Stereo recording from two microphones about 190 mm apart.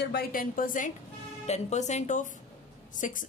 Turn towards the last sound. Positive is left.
turn(degrees=45)  # may be behind; listen again after turning